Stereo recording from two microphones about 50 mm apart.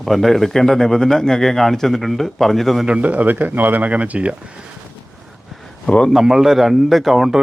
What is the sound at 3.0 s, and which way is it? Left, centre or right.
Speech, right.